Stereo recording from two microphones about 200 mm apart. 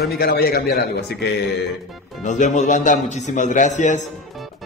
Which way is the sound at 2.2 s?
40° left (ahead or behind).